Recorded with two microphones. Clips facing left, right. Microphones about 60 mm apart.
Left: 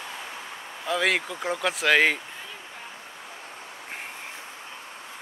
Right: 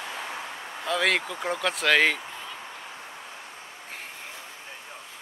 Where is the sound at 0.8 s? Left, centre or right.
Centre.